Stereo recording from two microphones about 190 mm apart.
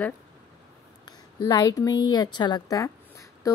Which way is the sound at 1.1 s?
20° left (ahead or behind).